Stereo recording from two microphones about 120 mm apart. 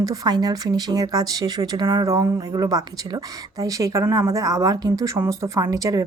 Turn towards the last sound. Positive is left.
turn(degrees=-30)  # may be behind; listen again after turning